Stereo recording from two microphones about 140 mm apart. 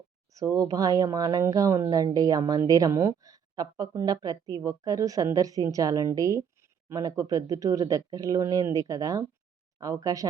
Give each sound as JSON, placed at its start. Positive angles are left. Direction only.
{"t": 0.3, "sound": "speech", "side_deg": -25}